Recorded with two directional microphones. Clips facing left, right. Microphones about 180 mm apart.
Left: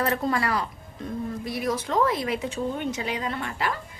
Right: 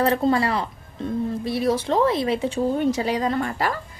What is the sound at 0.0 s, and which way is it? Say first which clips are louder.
A woman's voice: right 5 dB; 30° right (ahead or behind).